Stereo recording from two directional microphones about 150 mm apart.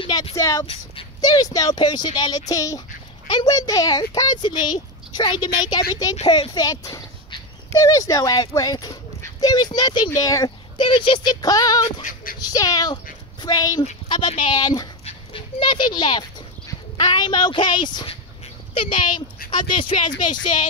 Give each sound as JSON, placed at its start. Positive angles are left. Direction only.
{"t": 0.0, "sound": "a sound", "side_deg": 35}
{"t": 1.2, "sound": "speech", "side_deg": 25}
{"t": 11.8, "sound": "female singing", "side_deg": 55}
{"t": 12.4, "sound": "a woman's voice", "side_deg": 25}